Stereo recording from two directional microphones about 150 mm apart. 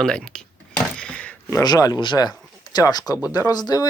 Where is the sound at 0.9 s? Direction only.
5° left (ahead or behind).